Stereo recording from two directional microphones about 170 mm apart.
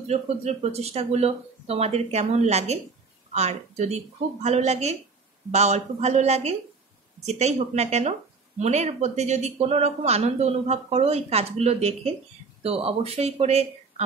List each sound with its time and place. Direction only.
0.0 s speech: 40° right (ahead or behind)